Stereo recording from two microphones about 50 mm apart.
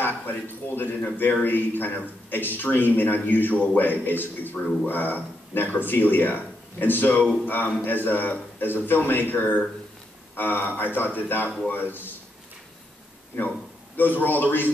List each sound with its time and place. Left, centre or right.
0.0 s speech: left
13.9 s speech: left